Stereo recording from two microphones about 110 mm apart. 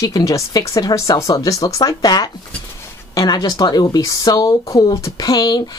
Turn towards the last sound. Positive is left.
turn(degrees=35)  # may be behind; listen again after turning